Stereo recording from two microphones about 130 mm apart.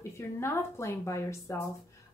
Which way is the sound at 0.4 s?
20° left (ahead or behind).